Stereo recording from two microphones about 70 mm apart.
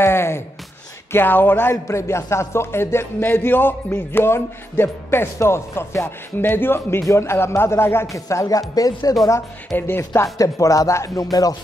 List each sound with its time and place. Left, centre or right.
0.0 s a sound: left
1.1 s speech: left
1.9 s speech: left
8.1 s speech: left
9.8 s speech: left
10.3 s speech: left